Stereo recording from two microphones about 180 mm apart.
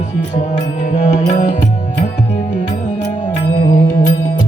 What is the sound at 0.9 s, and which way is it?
Music, 40° left (ahead or behind).